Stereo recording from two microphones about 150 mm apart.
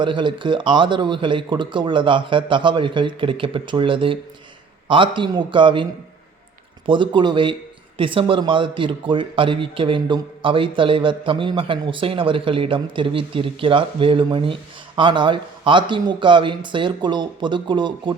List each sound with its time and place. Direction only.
0.0 s speech: 30° right (ahead or behind)